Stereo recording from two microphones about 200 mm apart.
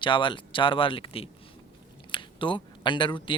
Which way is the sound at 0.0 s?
25° left (ahead or behind).